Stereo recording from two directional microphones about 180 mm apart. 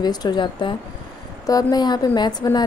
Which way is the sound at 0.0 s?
20° left (ahead or behind).